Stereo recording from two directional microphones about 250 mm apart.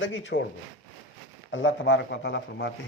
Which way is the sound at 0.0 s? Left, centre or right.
Left.